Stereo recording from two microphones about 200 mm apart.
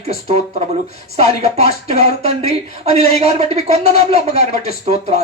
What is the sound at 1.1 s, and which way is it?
Speech, 30° right (ahead or behind).